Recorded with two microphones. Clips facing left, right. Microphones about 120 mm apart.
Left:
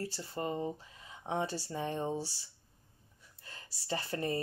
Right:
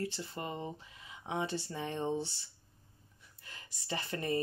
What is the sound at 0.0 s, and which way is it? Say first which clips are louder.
Speech: left 1 dB; 35° left (ahead or behind).